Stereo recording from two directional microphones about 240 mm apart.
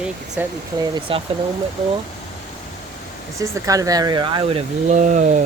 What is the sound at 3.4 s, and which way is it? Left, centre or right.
Speech, centre.